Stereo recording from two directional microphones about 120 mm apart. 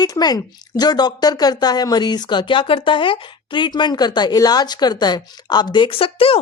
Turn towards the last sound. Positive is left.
turn(degrees=50)  # may be behind; listen again after turning